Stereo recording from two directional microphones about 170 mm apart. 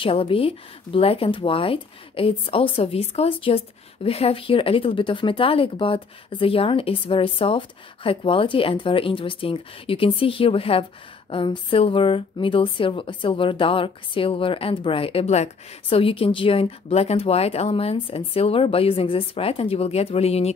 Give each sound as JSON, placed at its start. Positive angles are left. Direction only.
{"t": 0.0, "sound": "speech", "side_deg": 35}